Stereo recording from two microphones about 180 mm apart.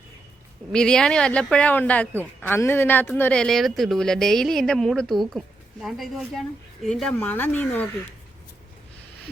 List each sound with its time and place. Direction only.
0.7 s speech: 5° left (ahead or behind)